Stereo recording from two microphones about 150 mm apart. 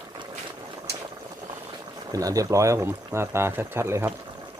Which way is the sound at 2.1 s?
25° right (ahead or behind).